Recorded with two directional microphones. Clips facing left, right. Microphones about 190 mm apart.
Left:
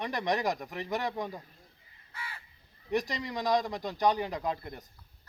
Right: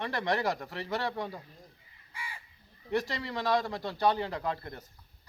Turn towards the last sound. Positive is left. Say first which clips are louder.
# left 1 dB
turn(degrees=15)  # may be behind; listen again after turning